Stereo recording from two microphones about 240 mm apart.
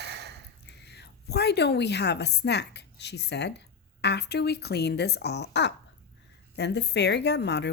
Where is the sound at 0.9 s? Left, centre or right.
Left.